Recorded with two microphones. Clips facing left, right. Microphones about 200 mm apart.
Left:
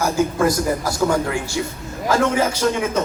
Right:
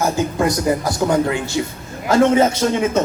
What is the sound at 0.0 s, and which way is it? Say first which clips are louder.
A man's voice: even; 20° right (ahead or behind).